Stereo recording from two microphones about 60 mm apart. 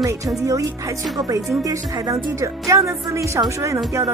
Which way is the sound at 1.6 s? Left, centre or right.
Right.